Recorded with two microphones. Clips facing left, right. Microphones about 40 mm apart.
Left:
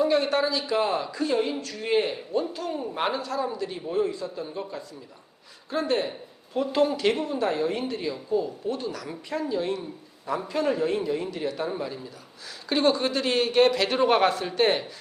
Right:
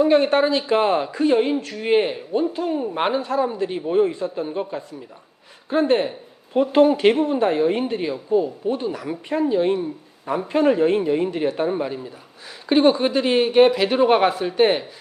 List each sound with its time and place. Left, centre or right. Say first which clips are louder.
0.0 s speech: right 6 dB; right; by 14.8 s centre